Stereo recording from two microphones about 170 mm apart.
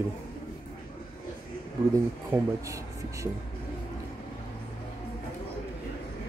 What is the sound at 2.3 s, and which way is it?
Speech, 15° right (ahead or behind).